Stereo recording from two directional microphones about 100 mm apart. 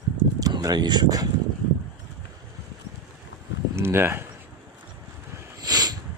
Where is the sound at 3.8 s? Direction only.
25° right (ahead or behind).